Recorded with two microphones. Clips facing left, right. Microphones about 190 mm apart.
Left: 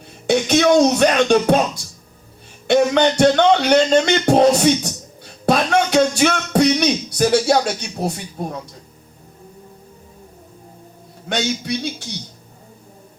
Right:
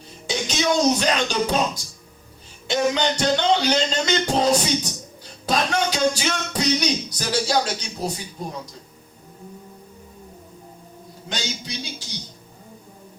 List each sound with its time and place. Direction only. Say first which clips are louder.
0.3 s speech: left 9 dB; 60° left (ahead or behind)
2.6 s music: left 7 dB; 60° left (ahead or behind)
11.3 s music: left 9 dB; 60° left (ahead or behind)